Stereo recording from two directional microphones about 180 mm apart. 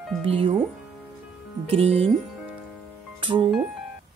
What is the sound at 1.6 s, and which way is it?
Speech, 35° right (ahead or behind).